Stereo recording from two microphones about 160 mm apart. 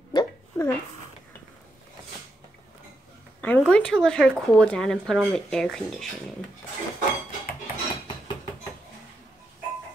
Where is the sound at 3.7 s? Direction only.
5° left (ahead or behind).